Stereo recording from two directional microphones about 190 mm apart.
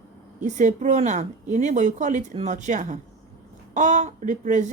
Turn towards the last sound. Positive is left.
turn(degrees=-40)  # may be behind; listen again after turning